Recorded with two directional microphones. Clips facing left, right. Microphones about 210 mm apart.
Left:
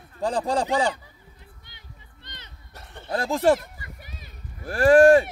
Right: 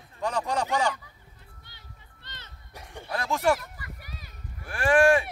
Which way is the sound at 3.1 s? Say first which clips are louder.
Left 5 dB; 30° left (ahead or behind).